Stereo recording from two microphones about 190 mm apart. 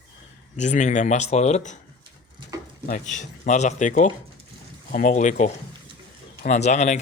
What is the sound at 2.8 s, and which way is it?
A man's voice, 40° left (ahead or behind).